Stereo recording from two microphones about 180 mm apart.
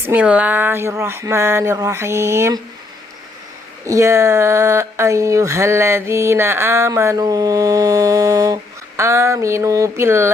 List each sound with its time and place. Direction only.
0.1 s speech: 5° right (ahead or behind)
3.8 s speech: 15° right (ahead or behind)